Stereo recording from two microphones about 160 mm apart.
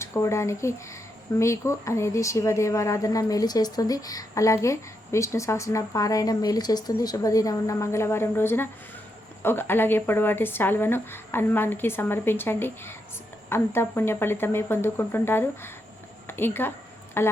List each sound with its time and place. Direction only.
0.0 s a woman's voice: 15° left (ahead or behind)